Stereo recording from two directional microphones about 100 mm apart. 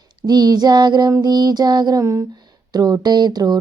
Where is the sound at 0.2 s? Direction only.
40° right (ahead or behind).